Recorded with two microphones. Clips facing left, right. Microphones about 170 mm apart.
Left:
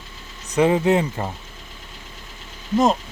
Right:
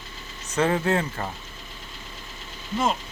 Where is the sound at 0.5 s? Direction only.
15° left (ahead or behind).